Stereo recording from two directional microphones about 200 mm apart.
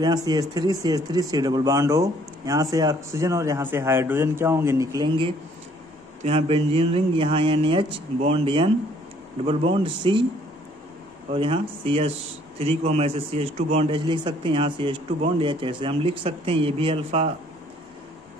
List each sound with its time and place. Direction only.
0.0 s a man's voice: 20° right (ahead or behind)
11.2 s a man's voice: 25° right (ahead or behind)